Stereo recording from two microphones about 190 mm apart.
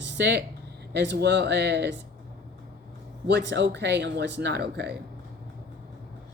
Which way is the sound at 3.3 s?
65° right (ahead or behind).